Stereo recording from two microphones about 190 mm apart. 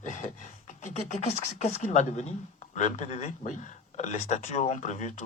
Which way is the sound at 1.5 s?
35° left (ahead or behind).